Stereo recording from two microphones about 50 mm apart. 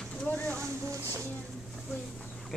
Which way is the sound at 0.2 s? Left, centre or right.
Left.